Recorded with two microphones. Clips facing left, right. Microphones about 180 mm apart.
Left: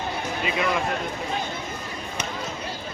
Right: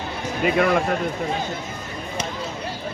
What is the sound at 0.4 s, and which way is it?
Speech, 50° right (ahead or behind).